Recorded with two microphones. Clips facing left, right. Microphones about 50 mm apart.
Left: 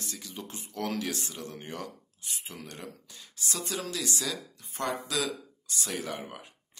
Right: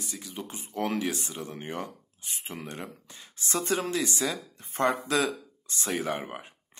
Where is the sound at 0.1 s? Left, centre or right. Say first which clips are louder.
Right 3 dB; centre.